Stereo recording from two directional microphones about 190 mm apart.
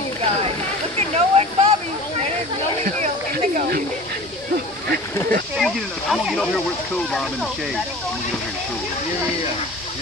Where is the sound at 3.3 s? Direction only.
45° right (ahead or behind).